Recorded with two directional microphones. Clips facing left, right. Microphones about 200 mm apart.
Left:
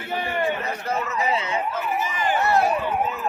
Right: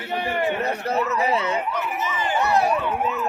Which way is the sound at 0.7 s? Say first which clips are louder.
Right 3 dB; 35° right (ahead or behind).